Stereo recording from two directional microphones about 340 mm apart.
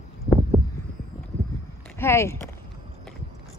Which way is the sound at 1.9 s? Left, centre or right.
Centre.